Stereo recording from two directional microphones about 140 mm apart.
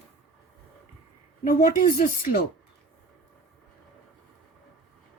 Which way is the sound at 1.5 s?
85° left.